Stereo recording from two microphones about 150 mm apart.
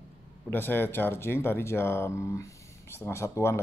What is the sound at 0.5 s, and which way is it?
Speech, 15° left (ahead or behind).